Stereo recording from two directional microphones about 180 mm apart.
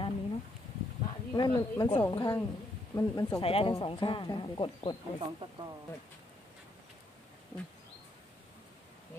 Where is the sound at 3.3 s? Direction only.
30° left (ahead or behind).